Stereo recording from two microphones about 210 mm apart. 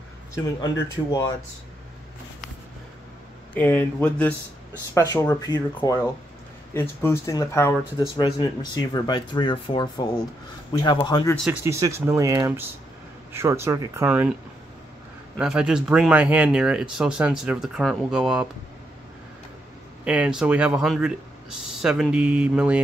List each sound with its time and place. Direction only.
0.3 s speech: 20° left (ahead or behind)
3.5 s speech: 10° left (ahead or behind)
11.6 s speech: 15° right (ahead or behind)
15.3 s speech: 5° right (ahead or behind)
20.1 s speech: 5° right (ahead or behind)